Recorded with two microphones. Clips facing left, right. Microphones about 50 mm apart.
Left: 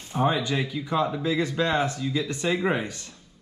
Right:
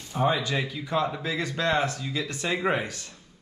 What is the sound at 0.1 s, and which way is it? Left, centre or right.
Speech, centre.